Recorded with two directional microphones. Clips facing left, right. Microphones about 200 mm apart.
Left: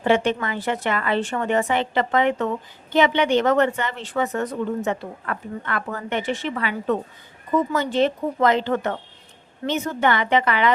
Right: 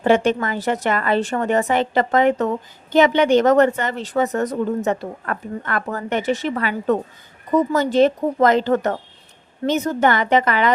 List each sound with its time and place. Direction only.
0.0 s a woman's voice: 45° right (ahead or behind)